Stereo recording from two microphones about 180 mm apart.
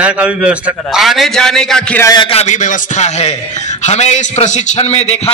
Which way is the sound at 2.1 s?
30° left (ahead or behind).